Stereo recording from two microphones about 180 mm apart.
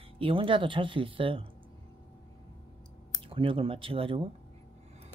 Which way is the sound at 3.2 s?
30° right (ahead or behind).